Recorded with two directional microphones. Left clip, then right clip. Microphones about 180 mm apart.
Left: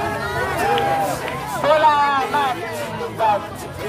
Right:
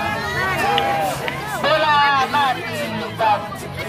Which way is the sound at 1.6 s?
80° left.